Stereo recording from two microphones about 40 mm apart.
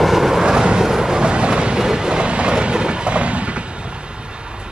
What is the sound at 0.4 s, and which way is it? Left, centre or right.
Vehicle, centre.